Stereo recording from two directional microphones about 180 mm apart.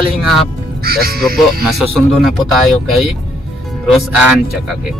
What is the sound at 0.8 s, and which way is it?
Speech, 55° right (ahead or behind).